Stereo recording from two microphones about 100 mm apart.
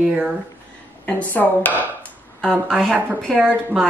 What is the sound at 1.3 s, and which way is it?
Speech, 15° left (ahead or behind).